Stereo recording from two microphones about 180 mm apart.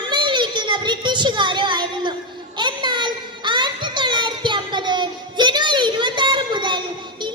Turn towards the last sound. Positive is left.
turn(degrees=-25)  # may be behind; listen again after turning